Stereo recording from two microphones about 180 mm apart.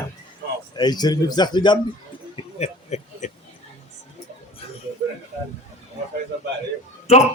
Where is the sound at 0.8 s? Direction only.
25° left (ahead or behind).